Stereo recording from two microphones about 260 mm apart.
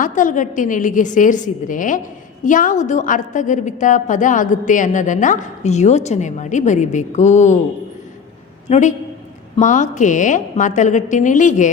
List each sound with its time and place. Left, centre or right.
0.0 s a woman's voice: left
8.7 s a woman's voice: left